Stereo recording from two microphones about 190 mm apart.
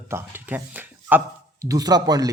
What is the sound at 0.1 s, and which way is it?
Speech, 10° right (ahead or behind).